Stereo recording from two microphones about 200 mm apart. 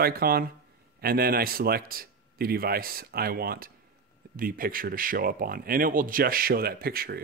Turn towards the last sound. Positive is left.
turn(degrees=-50)  # may be behind; listen again after turning